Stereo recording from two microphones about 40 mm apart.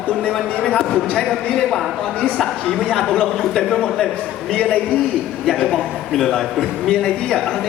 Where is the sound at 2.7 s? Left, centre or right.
Centre.